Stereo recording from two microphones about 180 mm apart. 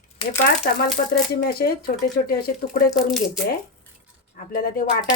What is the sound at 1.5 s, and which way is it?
Speech, 60° left (ahead or behind).